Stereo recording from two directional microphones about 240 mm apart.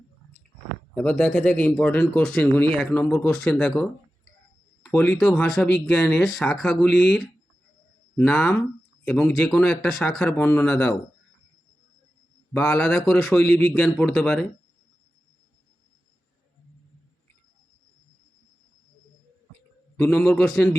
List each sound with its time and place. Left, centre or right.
0.9 s speech: centre
12.5 s speech: centre
20.0 s speech: centre